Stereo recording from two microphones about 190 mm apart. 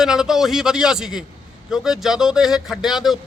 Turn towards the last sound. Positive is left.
turn(degrees=0)  # may be behind; listen again after turning